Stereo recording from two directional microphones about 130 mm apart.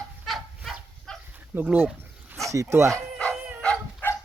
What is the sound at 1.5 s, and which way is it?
Speech, 15° right (ahead or behind).